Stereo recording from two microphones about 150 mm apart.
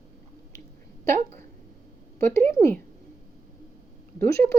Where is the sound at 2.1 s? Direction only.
15° left (ahead or behind).